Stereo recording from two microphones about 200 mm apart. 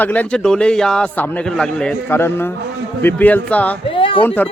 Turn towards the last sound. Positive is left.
turn(degrees=10)  # may be behind; listen again after turning